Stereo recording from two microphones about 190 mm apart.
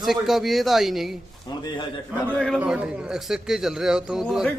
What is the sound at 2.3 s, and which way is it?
Speech, 5° left (ahead or behind).